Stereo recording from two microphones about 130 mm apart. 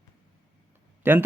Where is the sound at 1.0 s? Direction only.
15° right (ahead or behind).